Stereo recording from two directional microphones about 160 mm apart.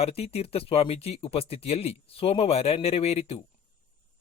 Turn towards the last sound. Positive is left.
turn(degrees=40)  # may be behind; listen again after turning